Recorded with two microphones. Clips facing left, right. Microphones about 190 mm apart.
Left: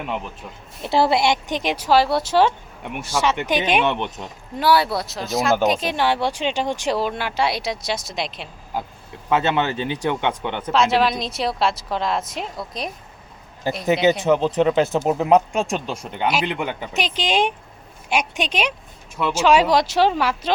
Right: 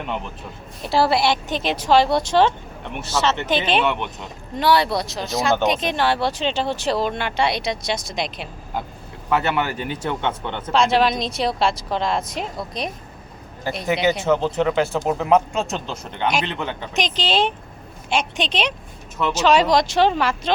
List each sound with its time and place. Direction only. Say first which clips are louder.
0.0 s speech: even; 5° left (ahead or behind)
0.8 s a woman's voice: left 1 dB; 20° left (ahead or behind); by 8.8 s centre (ahead or behind)
9.3 s speech: left 1 dB; 20° left (ahead or behind)
10.7 s speech: right 1 dB; centre (ahead or behind)
13.8 s a woman's voice: left 2 dB; 20° left (ahead or behind)